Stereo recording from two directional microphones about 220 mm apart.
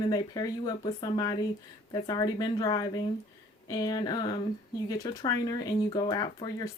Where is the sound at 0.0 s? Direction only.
20° left (ahead or behind).